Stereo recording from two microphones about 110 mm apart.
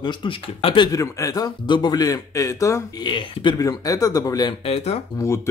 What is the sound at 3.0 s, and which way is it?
Speech, 45° left (ahead or behind).